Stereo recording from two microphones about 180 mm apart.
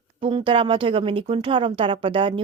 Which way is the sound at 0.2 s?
30° right (ahead or behind).